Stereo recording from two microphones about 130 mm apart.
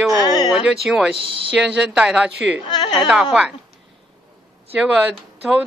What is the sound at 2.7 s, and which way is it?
Speech, 30° left (ahead or behind).